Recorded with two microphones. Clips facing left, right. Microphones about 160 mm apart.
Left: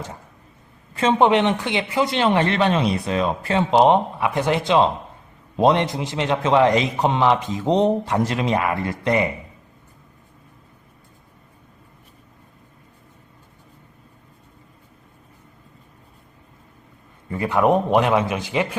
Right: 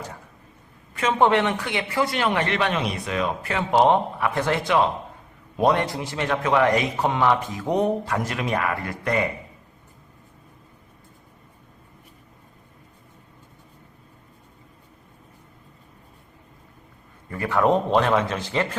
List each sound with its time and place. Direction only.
1.2 s a man's voice: 20° left (ahead or behind)
17.2 s a man's voice: 20° left (ahead or behind)